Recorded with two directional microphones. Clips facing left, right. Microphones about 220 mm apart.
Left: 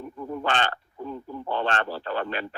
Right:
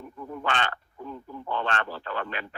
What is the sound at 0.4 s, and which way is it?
A man's voice, 35° left (ahead or behind).